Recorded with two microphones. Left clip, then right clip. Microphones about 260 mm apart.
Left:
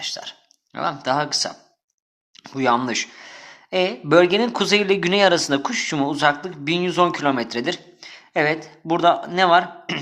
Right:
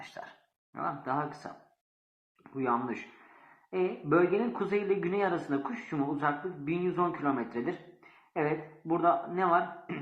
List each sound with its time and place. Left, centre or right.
0.7 s a man's voice: left